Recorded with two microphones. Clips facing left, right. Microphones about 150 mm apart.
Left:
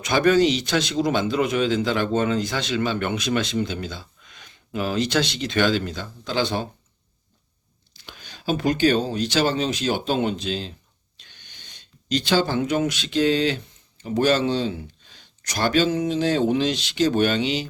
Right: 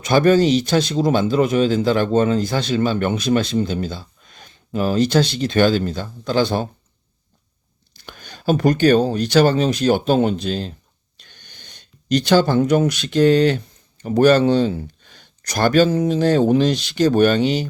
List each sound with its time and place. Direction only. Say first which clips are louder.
0.1 s a man's voice: right 4 dB; 40° right (ahead or behind)
7.9 s speech: right 5 dB; 50° right (ahead or behind)